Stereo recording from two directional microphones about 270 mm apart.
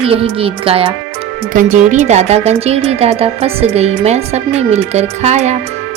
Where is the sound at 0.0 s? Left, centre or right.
Right.